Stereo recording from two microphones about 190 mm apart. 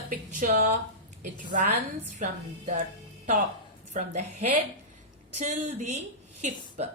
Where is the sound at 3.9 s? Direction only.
40° right (ahead or behind).